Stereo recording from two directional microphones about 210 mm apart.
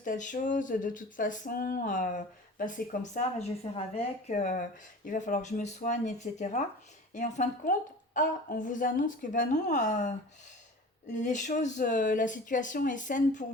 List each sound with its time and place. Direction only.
0.0 s speech: 40° left (ahead or behind)